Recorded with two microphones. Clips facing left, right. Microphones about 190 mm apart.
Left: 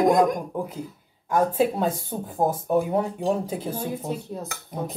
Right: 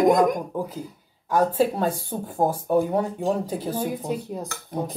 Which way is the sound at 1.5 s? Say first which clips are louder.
Even; centre (ahead or behind).